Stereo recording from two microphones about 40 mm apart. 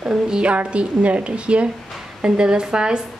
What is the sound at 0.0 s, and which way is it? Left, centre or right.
Speech, centre.